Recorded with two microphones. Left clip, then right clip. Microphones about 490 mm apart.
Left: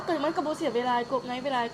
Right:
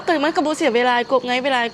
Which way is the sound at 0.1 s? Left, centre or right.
Right.